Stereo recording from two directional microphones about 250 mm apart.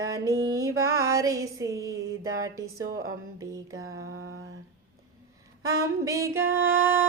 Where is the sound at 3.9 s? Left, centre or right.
Right.